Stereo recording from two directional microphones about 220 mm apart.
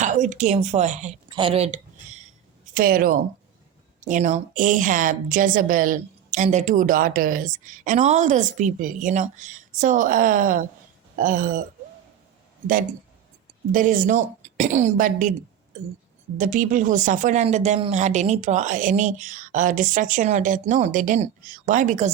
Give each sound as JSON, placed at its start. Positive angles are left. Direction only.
{"t": 0.0, "sound": "a woman's voice", "side_deg": -35}
{"t": 1.3, "sound": "a sound", "side_deg": -25}
{"t": 2.7, "sound": "a woman's voice", "side_deg": -40}
{"t": 13.7, "sound": "a woman's voice", "side_deg": -35}
{"t": 16.4, "sound": "a woman's voice", "side_deg": -35}